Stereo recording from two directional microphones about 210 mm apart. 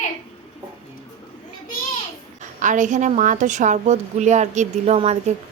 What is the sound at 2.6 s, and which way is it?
A woman's voice, 35° right (ahead or behind).